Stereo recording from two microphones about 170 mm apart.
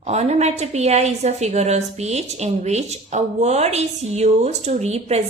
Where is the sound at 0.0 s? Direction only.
40° right (ahead or behind).